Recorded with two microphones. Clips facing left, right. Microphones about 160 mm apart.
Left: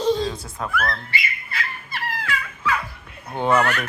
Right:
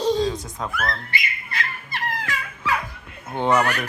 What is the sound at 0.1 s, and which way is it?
Cat, 15° right (ahead or behind).